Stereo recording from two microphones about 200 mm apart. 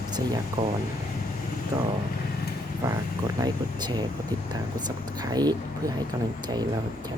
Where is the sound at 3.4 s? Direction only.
20° right (ahead or behind).